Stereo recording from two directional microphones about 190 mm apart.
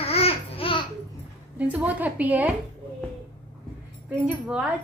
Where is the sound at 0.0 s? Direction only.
30° left (ahead or behind).